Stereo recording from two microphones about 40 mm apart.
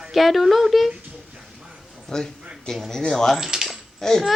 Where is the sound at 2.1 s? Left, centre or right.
Centre.